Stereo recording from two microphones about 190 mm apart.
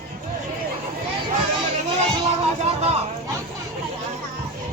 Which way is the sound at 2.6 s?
35° right (ahead or behind).